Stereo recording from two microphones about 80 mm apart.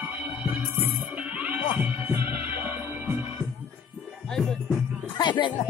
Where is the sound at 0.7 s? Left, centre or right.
Centre.